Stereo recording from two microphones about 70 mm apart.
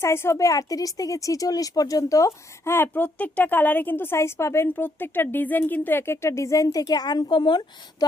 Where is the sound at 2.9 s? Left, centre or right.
Left.